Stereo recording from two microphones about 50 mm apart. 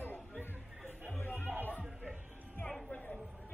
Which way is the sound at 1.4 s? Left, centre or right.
Right.